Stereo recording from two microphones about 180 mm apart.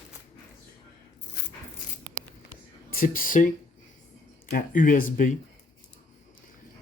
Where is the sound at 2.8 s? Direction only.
50° left (ahead or behind).